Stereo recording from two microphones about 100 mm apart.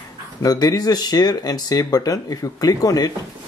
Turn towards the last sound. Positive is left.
turn(degrees=35)  # may be behind; listen again after turning